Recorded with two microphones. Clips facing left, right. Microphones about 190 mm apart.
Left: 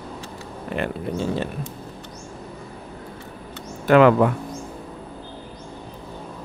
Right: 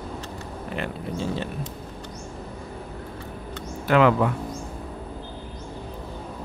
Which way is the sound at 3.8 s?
55° left (ahead or behind).